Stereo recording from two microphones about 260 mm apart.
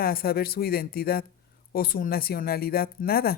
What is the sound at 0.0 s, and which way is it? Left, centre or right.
A woman's voice, left.